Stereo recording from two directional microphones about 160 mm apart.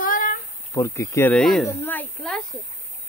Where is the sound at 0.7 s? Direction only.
20° left (ahead or behind).